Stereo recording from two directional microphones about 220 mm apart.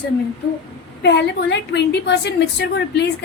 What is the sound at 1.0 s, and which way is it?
A woman's voice, 50° left (ahead or behind).